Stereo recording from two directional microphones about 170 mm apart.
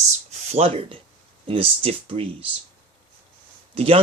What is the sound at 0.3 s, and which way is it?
Speech, 40° right (ahead or behind).